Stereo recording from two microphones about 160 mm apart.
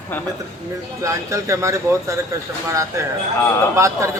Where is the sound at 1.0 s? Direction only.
20° right (ahead or behind).